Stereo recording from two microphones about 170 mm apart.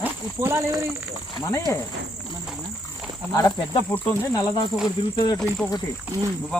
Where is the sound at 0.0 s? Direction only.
15° right (ahead or behind).